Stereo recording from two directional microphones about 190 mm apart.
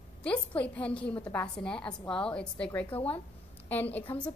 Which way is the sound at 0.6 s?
5° left (ahead or behind).